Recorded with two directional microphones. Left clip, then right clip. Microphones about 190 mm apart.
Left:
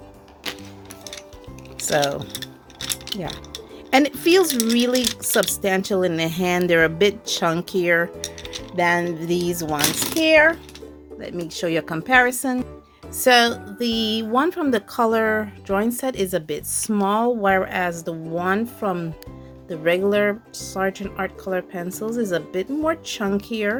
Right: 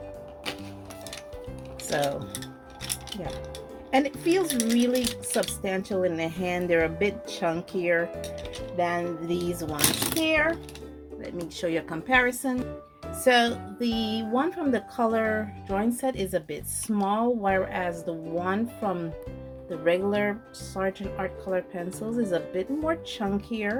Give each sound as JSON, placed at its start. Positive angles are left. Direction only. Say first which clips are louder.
{"t": 1.9, "sound": "speech", "louder": "left 7 dB", "side_deg": 40}
{"t": 2.3, "sound": "music", "louder": "left 5 dB", "side_deg": 15}
{"t": 3.9, "sound": "a woman's voice", "louder": "left 8 dB", "side_deg": 45}
{"t": 4.4, "sound": "speech", "louder": "left 5 dB", "side_deg": 15}
{"t": 5.6, "sound": "a woman's voice", "louder": "left 7 dB", "side_deg": 45}